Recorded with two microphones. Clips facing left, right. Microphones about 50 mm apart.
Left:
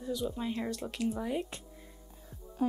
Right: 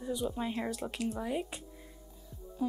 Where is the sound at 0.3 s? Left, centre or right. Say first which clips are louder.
Even; centre.